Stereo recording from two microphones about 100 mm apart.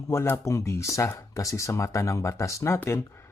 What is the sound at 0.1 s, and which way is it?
Speech, 30° left (ahead or behind).